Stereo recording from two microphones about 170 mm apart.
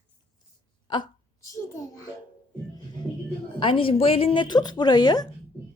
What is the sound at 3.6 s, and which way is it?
A woman's voice, 30° left (ahead or behind).